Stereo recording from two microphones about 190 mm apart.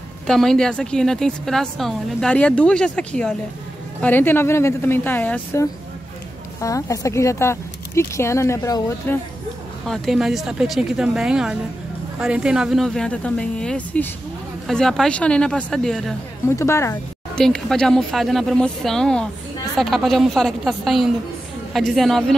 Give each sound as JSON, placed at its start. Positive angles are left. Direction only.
{"t": 0.3, "sound": "a woman's voice", "side_deg": 5}
{"t": 9.8, "sound": "a woman's voice", "side_deg": 0}
{"t": 16.4, "sound": "speech", "side_deg": 15}
{"t": 17.4, "sound": "a woman's voice", "side_deg": 5}